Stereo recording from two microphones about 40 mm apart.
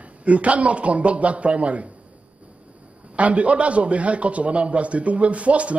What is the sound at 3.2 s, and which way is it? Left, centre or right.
A man's voice, right.